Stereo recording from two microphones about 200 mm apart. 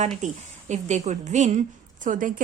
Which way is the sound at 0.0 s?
35° right (ahead or behind).